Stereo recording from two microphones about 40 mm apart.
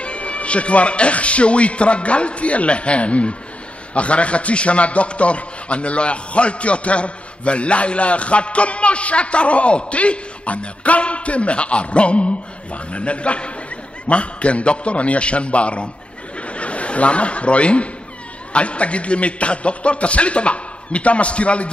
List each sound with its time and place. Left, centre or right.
0.0 s a man's voice: left
16.3 s chuckle: left
18.5 s a man's voice: left